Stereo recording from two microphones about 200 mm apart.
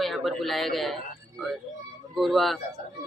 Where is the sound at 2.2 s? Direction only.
Centre (ahead or behind).